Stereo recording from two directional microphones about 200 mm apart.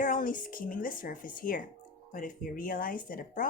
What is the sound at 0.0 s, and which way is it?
Speech, 40° left (ahead or behind).